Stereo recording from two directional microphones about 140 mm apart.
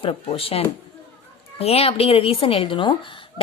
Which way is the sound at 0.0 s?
40° left (ahead or behind).